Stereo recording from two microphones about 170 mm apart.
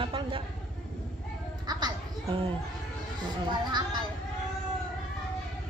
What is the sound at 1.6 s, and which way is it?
Children playing, 25° right (ahead or behind).